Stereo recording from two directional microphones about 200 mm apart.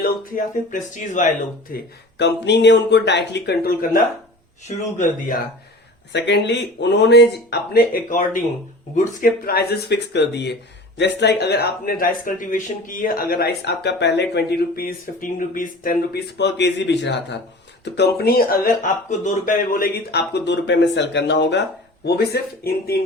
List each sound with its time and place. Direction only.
0.0 s speech: 40° left (ahead or behind)
1.7 s speech: 60° left (ahead or behind)
4.7 s speech: 35° left (ahead or behind)
6.1 s speech: 60° left (ahead or behind)